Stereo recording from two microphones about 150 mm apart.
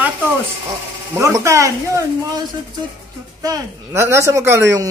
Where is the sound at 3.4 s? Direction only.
20° right (ahead or behind).